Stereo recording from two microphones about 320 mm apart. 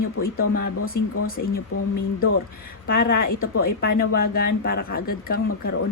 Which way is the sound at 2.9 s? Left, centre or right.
Left.